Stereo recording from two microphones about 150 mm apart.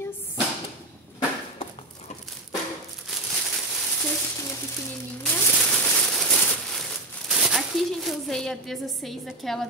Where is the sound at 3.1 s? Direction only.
Centre (ahead or behind).